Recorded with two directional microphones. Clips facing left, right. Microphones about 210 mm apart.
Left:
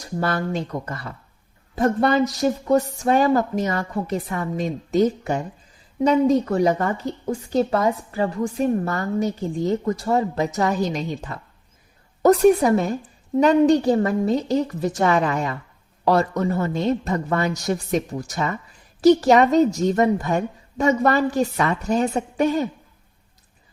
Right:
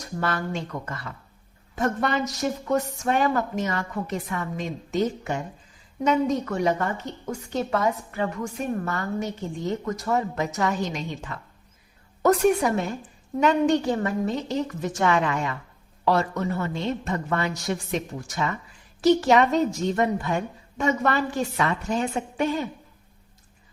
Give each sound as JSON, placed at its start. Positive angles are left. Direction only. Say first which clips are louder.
{"t": 0.0, "sound": "a woman's voice", "louder": "left 4 dB", "side_deg": 35}